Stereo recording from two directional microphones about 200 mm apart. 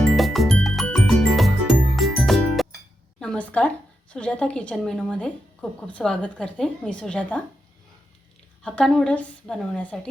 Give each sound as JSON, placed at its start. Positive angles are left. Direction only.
{"t": 0.2, "sound": "music", "side_deg": 0}
{"t": 3.2, "sound": "a sound", "side_deg": 5}
{"t": 4.1, "sound": "a woman's voice", "side_deg": 5}
{"t": 8.6, "sound": "a woman's voice", "side_deg": 5}